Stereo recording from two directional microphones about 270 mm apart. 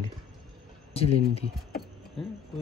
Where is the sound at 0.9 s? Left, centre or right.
Left.